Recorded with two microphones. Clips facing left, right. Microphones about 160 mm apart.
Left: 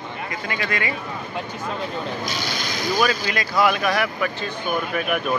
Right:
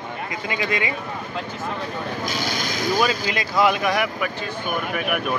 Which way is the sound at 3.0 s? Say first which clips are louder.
Even; 20° right (ahead or behind).